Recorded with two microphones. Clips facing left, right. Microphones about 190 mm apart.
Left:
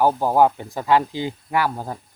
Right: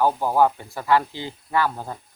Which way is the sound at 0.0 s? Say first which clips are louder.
Left 2 dB; 15° left (ahead or behind).